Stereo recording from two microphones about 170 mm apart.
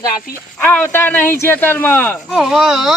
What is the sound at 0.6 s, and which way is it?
Speech, 10° left (ahead or behind).